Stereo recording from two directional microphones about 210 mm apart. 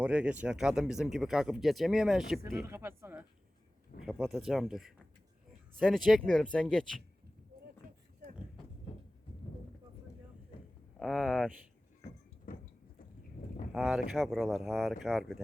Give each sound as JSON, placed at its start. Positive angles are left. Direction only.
{"t": 0.0, "sound": "speech", "side_deg": -5}
{"t": 11.0, "sound": "speech", "side_deg": 0}
{"t": 12.5, "sound": "a sound", "side_deg": 40}
{"t": 13.7, "sound": "speech", "side_deg": 0}